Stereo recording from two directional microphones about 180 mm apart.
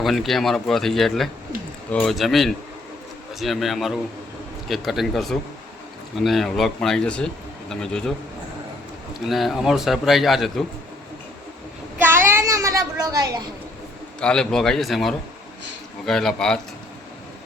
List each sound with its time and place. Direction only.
0.0 s a man's voice: centre (ahead or behind)
9.1 s a man's voice: centre (ahead or behind)
11.9 s child singing: 10° right (ahead or behind)
14.2 s a man's voice: 5° left (ahead or behind)